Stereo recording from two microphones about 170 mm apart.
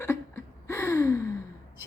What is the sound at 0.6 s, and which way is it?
Gasp, 15° left (ahead or behind).